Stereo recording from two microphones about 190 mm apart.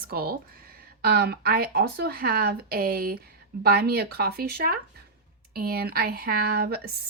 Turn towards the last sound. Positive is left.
turn(degrees=-55)  # may be behind; listen again after turning